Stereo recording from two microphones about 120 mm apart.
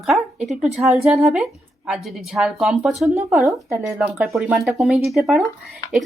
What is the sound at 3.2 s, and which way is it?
Speech, 25° right (ahead or behind).